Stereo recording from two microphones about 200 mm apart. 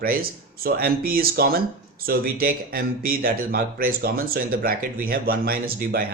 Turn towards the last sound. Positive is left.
turn(degrees=-50)  # may be behind; listen again after turning